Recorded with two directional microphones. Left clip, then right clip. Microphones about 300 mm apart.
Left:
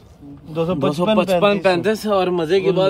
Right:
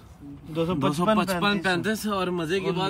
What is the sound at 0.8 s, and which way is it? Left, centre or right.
Speech, centre.